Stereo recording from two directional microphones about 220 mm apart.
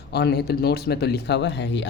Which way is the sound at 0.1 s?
50° left (ahead or behind).